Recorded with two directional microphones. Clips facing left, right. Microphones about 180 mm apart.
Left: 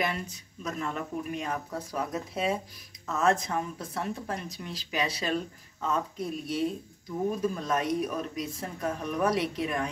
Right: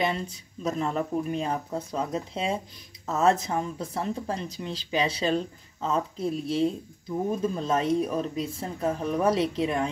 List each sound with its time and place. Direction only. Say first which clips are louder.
0.0 s speech: right 4 dB; 30° right (ahead or behind)